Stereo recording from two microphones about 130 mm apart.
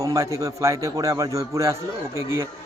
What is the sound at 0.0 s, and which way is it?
A man's voice, 25° right (ahead or behind).